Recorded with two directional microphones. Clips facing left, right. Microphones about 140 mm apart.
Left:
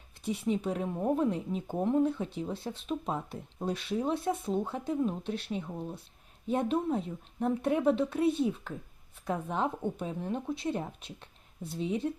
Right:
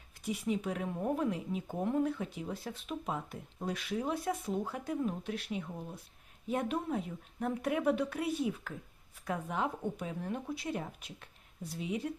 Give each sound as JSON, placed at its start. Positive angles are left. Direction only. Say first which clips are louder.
{"t": 0.3, "sound": "a woman's voice", "louder": "left 3 dB", "side_deg": 30}